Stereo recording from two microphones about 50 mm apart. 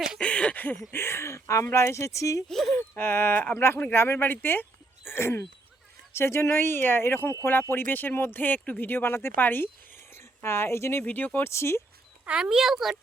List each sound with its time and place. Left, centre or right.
0.2 s a sound: left
0.9 s speech: left
2.5 s a sound: centre
3.0 s speech: left
5.0 s a sound: left
6.1 s speech: left
8.4 s speech: left
10.2 s speech: left
11.0 s speech: left
11.4 s speech: left
12.4 s speech: centre